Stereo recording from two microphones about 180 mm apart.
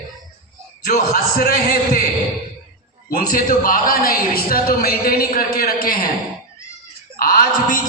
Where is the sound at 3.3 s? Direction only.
50° left (ahead or behind).